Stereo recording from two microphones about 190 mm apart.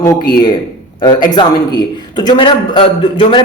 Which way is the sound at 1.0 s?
20° left (ahead or behind).